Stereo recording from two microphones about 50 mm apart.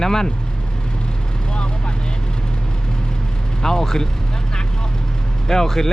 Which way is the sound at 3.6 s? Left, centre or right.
Centre.